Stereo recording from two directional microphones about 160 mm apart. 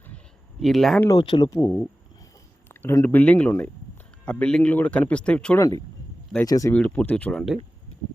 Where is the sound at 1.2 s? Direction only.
25° left (ahead or behind); by 5.5 s 5° left (ahead or behind).